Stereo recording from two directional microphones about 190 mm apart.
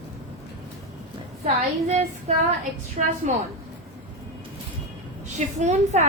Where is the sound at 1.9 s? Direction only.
35° right (ahead or behind).